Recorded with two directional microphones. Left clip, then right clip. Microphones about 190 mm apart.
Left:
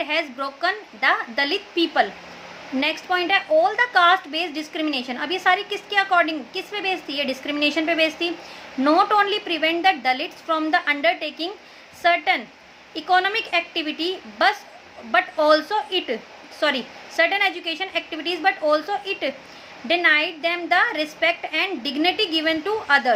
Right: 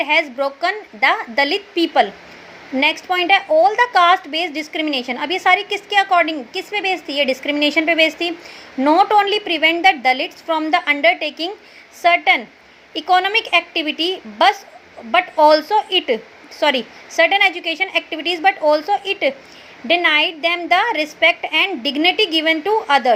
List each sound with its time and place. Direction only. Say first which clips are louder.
0.0 s a woman's voice: right 7 dB; 20° right (ahead or behind)